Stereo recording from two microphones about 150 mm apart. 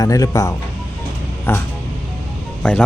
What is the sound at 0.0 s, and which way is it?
Speech, 25° left (ahead or behind).